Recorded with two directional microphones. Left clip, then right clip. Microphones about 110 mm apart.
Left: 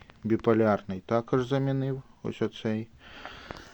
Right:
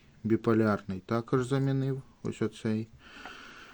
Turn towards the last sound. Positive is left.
turn(degrees=-20)  # may be behind; listen again after turning